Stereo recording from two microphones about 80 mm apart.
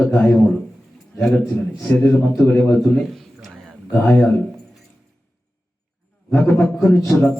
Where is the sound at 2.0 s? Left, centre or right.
Left.